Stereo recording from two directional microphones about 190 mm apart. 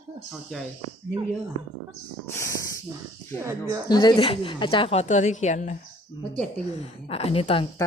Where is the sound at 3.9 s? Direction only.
25° left (ahead or behind).